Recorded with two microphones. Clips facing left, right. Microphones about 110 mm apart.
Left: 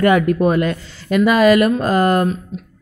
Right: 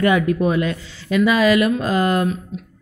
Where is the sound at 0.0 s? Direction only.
50° left (ahead or behind).